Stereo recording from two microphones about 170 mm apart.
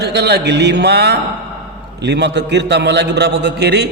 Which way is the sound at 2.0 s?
90° right.